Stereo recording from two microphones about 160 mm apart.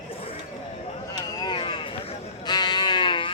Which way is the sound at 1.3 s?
30° left (ahead or behind).